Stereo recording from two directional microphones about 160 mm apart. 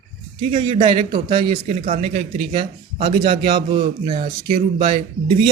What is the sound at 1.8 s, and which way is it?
Speech, 60° right (ahead or behind).